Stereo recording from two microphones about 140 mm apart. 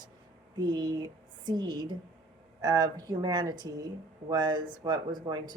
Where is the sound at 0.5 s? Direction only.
30° right (ahead or behind).